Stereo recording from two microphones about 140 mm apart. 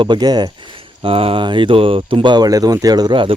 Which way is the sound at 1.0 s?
40° right (ahead or behind).